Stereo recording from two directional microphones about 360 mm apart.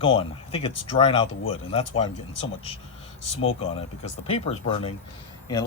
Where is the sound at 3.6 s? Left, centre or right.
Centre.